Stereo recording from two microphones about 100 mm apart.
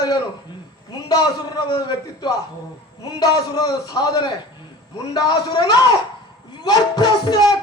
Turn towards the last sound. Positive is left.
turn(degrees=40)  # may be behind; listen again after turning